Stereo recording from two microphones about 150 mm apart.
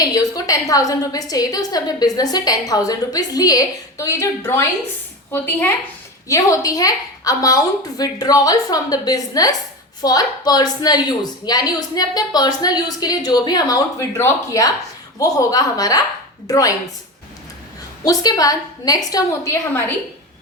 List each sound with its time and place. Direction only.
0.0 s a woman's voice: 25° left (ahead or behind)
18.0 s a woman's voice: 25° left (ahead or behind)